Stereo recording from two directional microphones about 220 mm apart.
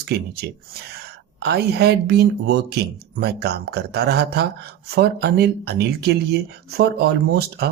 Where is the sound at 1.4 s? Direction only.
50° right (ahead or behind).